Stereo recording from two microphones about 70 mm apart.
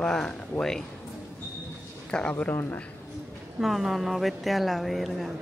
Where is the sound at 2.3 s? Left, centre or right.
Left.